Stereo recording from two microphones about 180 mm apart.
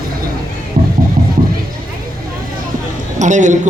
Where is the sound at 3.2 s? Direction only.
45° right (ahead or behind).